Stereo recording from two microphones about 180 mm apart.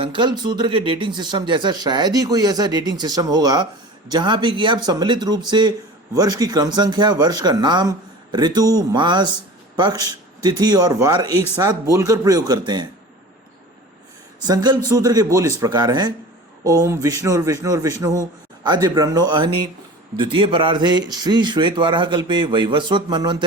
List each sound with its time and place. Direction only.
0.0 s speech: 25° right (ahead or behind)
14.4 s speech: 20° right (ahead or behind)